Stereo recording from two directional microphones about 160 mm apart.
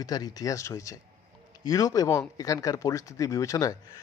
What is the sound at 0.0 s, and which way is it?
Speech, 25° left (ahead or behind).